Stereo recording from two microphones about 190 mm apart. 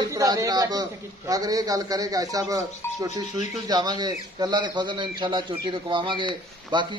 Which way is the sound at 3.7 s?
20° right (ahead or behind).